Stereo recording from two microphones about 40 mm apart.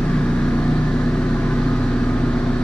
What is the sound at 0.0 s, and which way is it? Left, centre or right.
Vehicle, left.